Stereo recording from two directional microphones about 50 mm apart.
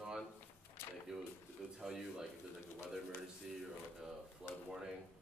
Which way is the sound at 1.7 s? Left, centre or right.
Centre.